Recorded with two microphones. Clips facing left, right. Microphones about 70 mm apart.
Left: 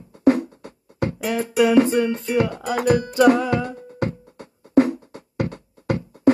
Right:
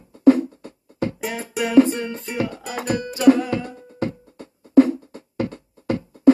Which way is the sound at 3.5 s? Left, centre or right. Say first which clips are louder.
Left 3 dB; left.